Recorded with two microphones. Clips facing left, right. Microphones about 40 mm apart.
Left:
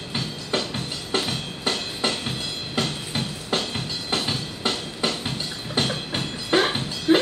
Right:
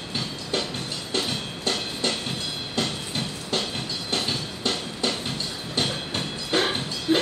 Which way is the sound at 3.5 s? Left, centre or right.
Centre.